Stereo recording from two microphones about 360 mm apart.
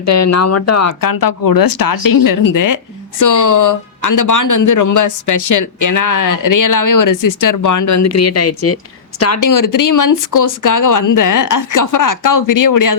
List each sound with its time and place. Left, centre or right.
0.0 s speech: left